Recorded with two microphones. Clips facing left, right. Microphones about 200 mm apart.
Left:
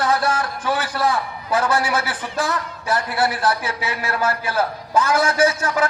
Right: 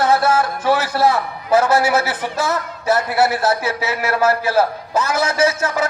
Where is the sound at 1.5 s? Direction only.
25° right (ahead or behind).